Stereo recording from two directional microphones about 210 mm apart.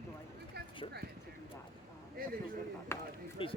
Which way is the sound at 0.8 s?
25° left (ahead or behind).